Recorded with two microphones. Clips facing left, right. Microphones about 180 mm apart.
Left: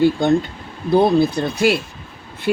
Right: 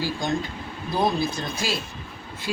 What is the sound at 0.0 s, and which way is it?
Speech, 60° left (ahead or behind).